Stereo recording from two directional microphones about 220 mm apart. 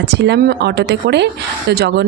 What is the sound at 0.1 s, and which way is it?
Speech, 50° right (ahead or behind).